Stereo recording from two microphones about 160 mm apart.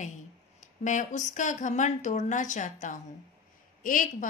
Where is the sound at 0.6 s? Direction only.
50° left (ahead or behind).